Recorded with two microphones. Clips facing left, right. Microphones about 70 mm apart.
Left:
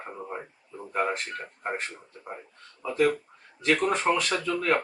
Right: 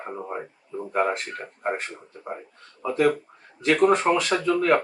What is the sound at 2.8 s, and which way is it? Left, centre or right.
Speech, centre.